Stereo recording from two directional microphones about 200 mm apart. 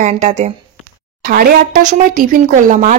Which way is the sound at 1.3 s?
45° right (ahead or behind).